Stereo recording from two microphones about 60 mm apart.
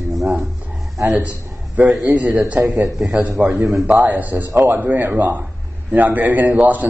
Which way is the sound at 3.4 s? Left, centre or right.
Centre.